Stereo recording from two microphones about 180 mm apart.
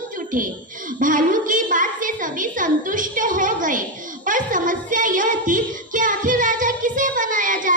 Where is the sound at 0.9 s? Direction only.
45° right (ahead or behind).